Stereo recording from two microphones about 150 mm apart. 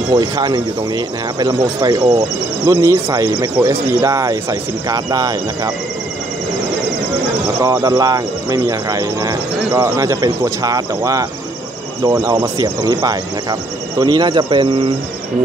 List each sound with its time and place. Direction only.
0.1 s speech: 25° right (ahead or behind)
7.6 s speech: 25° right (ahead or behind)